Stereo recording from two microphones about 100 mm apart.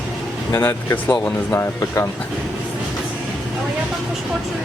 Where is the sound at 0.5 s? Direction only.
30° left (ahead or behind).